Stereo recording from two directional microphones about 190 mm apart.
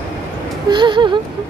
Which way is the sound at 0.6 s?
25° right (ahead or behind).